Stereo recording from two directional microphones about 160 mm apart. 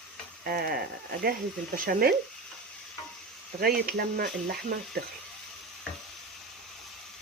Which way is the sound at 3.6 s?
70° right (ahead or behind).